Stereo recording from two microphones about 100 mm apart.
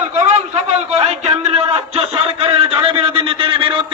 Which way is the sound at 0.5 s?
90° right.